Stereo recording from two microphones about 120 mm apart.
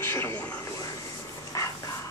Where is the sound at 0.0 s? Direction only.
20° left (ahead or behind).